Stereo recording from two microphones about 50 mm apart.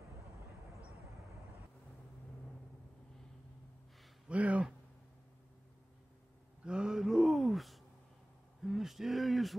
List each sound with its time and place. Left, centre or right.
4.3 s a sound: right
6.6 s gasp: centre
8.6 s hoot: centre